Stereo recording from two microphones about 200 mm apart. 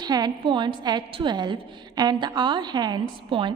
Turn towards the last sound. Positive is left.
turn(degrees=-25)  # may be behind; listen again after turning